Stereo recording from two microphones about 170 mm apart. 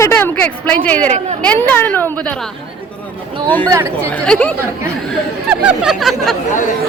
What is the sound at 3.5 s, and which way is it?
Speech, 10° left (ahead or behind).